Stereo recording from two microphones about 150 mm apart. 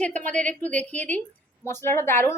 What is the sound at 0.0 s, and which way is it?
Speech, 10° left (ahead or behind).